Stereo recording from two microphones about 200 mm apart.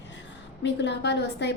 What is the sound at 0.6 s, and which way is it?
Speech, 60° left (ahead or behind).